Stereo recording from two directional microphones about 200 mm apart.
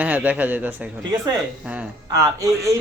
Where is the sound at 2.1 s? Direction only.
15° right (ahead or behind).